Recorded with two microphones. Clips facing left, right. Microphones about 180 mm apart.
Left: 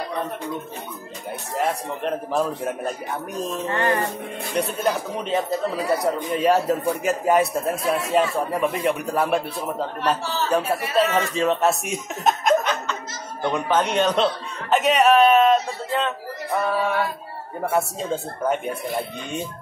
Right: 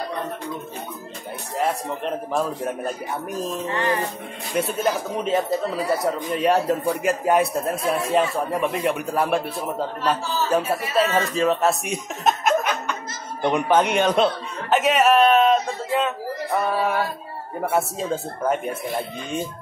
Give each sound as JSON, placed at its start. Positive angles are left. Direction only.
{"t": 1.6, "sound": "speech", "side_deg": 0}
{"t": 3.6, "sound": "music", "side_deg": 50}
{"t": 4.6, "sound": "speech", "side_deg": 0}
{"t": 14.7, "sound": "a sound", "side_deg": 0}
{"t": 16.6, "sound": "speech", "side_deg": -10}